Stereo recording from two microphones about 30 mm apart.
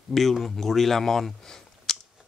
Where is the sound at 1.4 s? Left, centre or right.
Centre.